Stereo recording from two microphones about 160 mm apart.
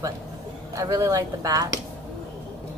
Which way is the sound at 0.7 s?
20° right (ahead or behind).